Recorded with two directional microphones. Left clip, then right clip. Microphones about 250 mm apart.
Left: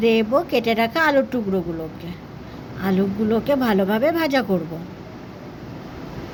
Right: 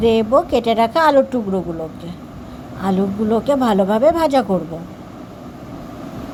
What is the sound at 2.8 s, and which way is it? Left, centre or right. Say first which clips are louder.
Speech: right 3 dB; centre.